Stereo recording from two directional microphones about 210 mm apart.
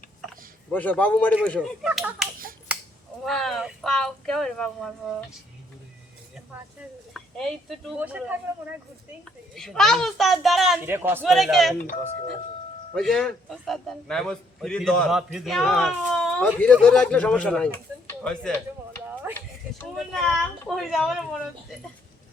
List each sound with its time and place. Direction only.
0.7 s a man's voice: 10° left (ahead or behind)
3.2 s a man's voice: centre (ahead or behind)
7.1 s speech: centre (ahead or behind)
9.6 s a man's voice: centre (ahead or behind)
10.8 s a man's voice: 10° right (ahead or behind)
11.2 s a man's voice: centre (ahead or behind)
11.8 s speech: 40° left (ahead or behind)
12.9 s a man's voice: 5° left (ahead or behind)
19.3 s a sound: 10° right (ahead or behind)
20.0 s a sound: centre (ahead or behind)